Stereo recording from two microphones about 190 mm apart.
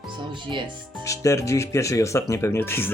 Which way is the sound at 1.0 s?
15° left (ahead or behind).